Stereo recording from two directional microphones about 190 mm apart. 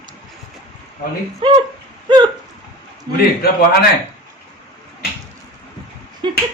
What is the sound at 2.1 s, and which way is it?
Hiccup, 25° right (ahead or behind).